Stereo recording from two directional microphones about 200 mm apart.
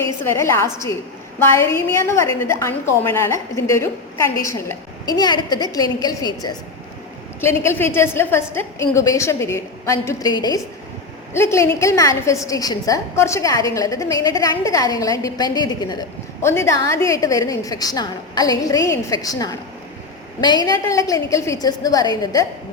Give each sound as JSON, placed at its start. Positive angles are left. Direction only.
{"t": 0.0, "sound": "a woman's voice", "side_deg": 15}